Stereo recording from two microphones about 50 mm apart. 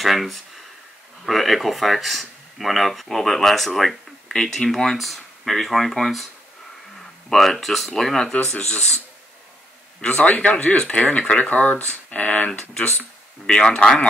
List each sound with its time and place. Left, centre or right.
0.0 s speech: centre
7.2 s speech: centre
10.2 s speech: left
12.4 s speech: centre